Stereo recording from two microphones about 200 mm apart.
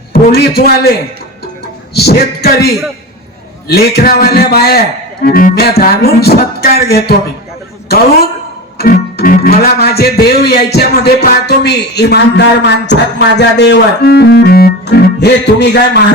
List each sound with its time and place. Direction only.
0.1 s speech: 50° left (ahead or behind)
8.8 s speech: 45° left (ahead or behind)
10.8 s music: 55° left (ahead or behind)